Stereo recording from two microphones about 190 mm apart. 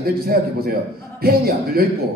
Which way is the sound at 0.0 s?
55° right (ahead or behind).